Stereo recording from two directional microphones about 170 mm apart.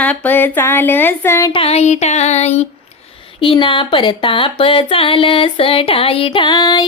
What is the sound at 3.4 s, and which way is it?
Female singing, 30° left (ahead or behind).